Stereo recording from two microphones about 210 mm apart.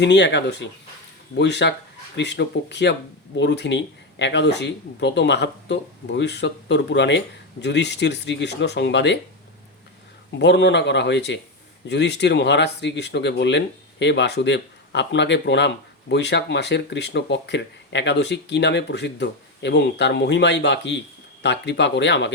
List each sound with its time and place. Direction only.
0.0 s speech: 55° left (ahead or behind)
10.3 s speech: 55° left (ahead or behind)